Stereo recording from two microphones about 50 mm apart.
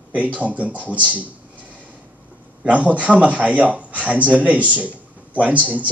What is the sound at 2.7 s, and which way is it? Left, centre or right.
A man's voice, right.